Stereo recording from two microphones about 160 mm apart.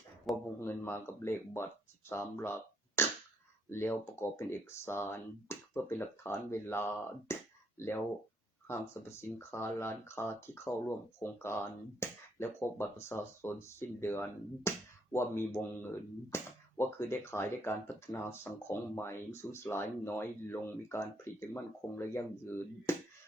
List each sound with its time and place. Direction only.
0.3 s a man's voice: centre (ahead or behind)
0.6 s speech: 15° left (ahead or behind)